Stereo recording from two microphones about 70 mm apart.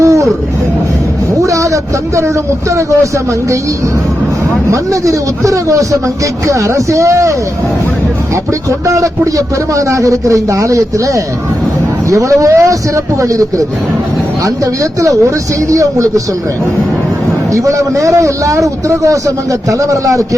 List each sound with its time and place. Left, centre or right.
0.0 s a sound: right
1.4 s speech: right
4.7 s a man's voice: right
8.9 s a man's voice: right
17.5 s a man's voice: right